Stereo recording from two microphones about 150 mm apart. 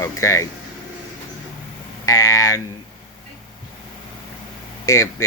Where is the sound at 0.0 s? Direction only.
20° left (ahead or behind).